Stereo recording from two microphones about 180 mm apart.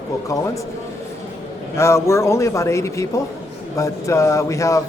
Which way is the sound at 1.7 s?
15° left (ahead or behind).